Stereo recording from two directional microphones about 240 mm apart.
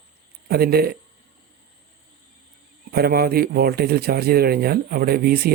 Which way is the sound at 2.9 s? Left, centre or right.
Right.